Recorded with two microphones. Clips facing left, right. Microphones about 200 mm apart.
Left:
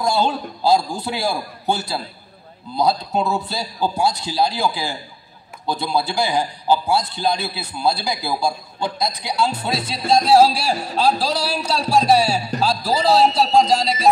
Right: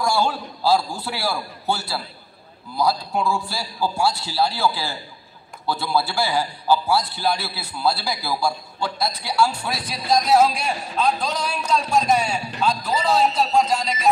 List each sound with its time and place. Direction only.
0.0 s a man's voice: 20° left (ahead or behind)